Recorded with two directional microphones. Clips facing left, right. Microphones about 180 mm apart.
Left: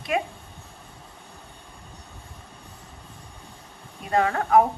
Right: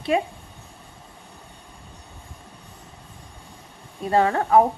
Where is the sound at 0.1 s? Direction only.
30° right (ahead or behind).